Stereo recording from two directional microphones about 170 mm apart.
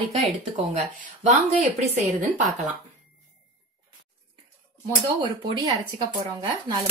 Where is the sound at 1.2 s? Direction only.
45° right (ahead or behind).